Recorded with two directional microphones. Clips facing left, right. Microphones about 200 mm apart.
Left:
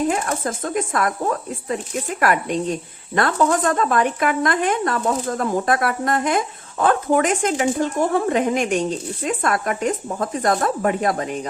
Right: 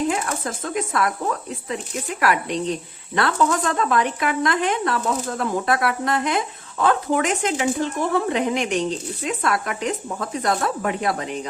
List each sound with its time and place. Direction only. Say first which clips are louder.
0.1 s speech: left 2 dB; 45° left (ahead or behind)